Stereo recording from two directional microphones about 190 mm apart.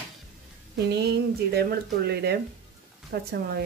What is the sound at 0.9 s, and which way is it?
Speech, 60° right (ahead or behind).